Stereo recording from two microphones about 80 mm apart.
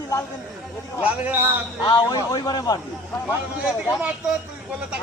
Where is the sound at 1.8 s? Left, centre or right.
Left.